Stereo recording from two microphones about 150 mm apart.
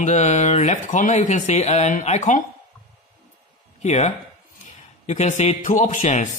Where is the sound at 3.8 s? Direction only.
50° left (ahead or behind).